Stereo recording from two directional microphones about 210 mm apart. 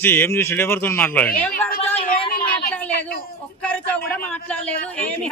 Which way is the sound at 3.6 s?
5° left (ahead or behind).